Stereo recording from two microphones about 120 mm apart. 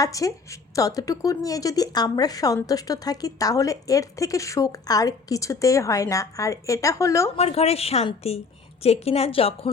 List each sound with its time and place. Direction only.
0.0 s speech: 30° left (ahead or behind)
7.3 s a woman's voice: 55° left (ahead or behind)